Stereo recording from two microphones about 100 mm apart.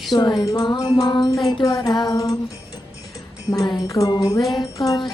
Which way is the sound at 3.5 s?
40° left (ahead or behind).